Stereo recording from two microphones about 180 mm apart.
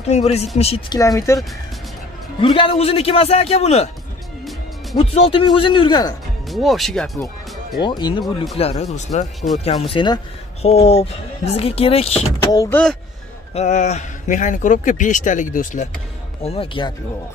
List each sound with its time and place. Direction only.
0.0 s speech: 35° left (ahead or behind)
0.9 s speech: 20° left (ahead or behind)
2.4 s speech: 30° left (ahead or behind)
4.9 s speech: 30° left (ahead or behind)
6.5 s speech: centre (ahead or behind)
7.8 s speech: 25° left (ahead or behind)
8.5 s speech: 35° left (ahead or behind)
9.8 s speech: 25° left (ahead or behind)
12.5 s speech: 10° left (ahead or behind)
13.6 s a man's voice: 40° left (ahead or behind)
16.4 s speech: 30° left (ahead or behind)